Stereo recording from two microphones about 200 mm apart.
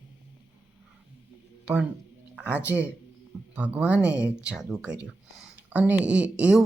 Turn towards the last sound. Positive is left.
turn(degrees=-5)  # may be behind; listen again after turning